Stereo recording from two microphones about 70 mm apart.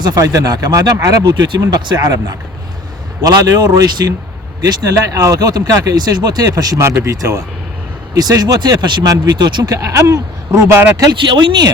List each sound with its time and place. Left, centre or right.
0.3 s speech: right
3.2 s speech: right
4.6 s speech: right
6.0 s speech: right
9.7 s speech: right
10.9 s speech: right